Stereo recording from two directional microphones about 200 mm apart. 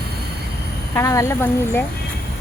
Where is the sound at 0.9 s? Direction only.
15° left (ahead or behind).